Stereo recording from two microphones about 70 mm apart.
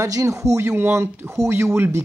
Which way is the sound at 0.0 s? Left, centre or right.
Right.